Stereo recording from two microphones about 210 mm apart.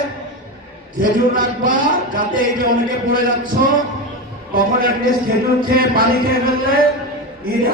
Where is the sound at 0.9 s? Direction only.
40° right (ahead or behind).